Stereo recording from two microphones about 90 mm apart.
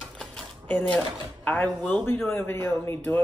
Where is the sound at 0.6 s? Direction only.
20° left (ahead or behind).